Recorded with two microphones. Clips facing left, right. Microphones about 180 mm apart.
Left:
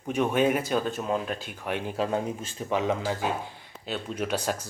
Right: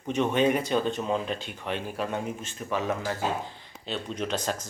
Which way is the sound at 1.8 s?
25° left (ahead or behind).